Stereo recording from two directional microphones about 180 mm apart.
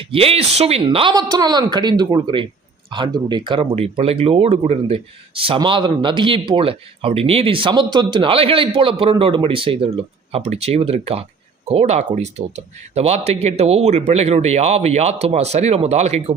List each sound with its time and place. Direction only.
0.0 s speech: 30° right (ahead or behind)